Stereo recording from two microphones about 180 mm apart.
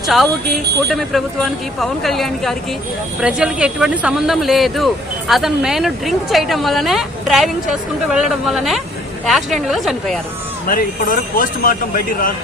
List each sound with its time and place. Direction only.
0.9 s speech: centre (ahead or behind)
10.7 s speech: 50° left (ahead or behind)